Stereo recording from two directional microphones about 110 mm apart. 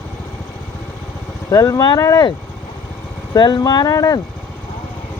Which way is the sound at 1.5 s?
30° left (ahead or behind).